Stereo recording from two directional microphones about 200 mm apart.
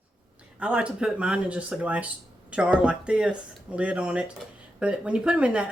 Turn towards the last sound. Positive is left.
turn(degrees=-5)  # may be behind; listen again after turning